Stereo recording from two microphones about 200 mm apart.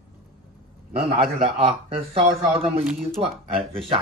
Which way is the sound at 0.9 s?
30° right (ahead or behind).